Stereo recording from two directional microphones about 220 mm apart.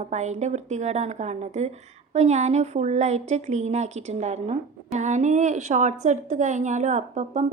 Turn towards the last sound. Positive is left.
turn(degrees=-35)  # may be behind; listen again after turning